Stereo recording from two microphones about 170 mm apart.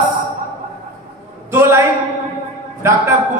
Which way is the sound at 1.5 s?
15° right (ahead or behind).